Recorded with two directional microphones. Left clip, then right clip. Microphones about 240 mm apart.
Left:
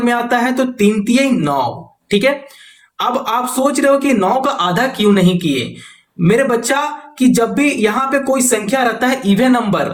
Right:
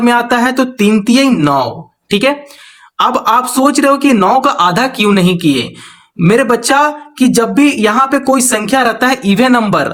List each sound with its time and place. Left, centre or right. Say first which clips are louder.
0.0 s speech: right 4 dB; right